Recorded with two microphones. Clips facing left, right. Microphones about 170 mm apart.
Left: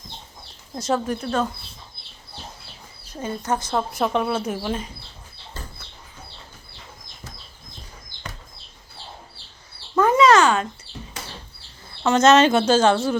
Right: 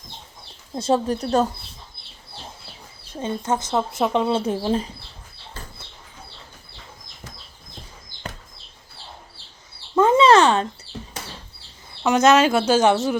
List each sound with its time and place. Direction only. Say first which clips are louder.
0.8 s speech: right 3 dB; 30° right (ahead or behind)
3.1 s speech: right 1 dB; 25° right (ahead or behind)
10.0 s a sound: right 1 dB; 25° right (ahead or behind)
12.0 s speech: left 1 dB; 10° right (ahead or behind)